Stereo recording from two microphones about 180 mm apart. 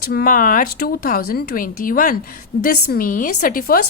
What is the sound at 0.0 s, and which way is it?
A woman's voice, 55° left (ahead or behind).